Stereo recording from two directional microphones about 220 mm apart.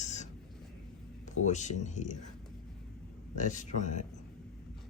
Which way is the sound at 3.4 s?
35° left (ahead or behind).